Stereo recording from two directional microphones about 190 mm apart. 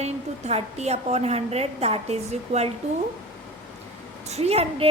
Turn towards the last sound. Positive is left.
turn(degrees=-30)  # may be behind; listen again after turning